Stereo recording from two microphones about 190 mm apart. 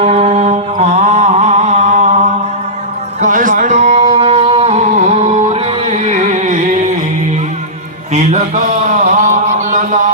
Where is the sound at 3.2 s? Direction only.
45° right (ahead or behind).